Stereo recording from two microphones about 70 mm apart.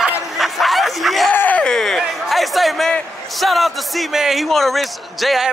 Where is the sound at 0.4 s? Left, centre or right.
Centre.